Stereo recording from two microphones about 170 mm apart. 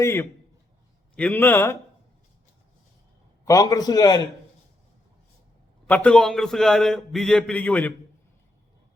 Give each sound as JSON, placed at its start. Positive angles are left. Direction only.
{"t": 0.0, "sound": "a man's voice", "side_deg": 15}
{"t": 3.4, "sound": "a man's voice", "side_deg": 20}
{"t": 5.9, "sound": "a man's voice", "side_deg": 5}